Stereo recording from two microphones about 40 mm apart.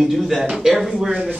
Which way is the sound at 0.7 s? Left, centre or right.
Centre.